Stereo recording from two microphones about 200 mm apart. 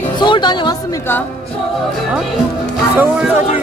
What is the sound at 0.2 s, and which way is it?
Speech, 20° left (ahead or behind).